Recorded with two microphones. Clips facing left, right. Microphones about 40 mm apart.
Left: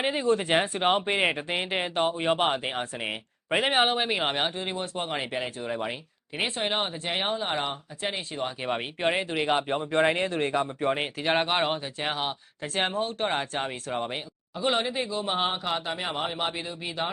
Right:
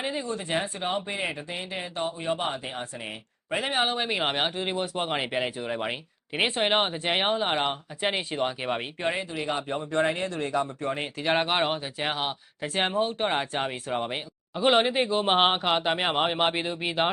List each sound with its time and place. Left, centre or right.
0.0 s speech: left
3.8 s speech: centre
4.2 s speech: centre; by 8.5 s right
9.0 s speech: centre
9.3 s speech: left
10.8 s speech: left
11.2 s speech: centre
14.5 s speech: right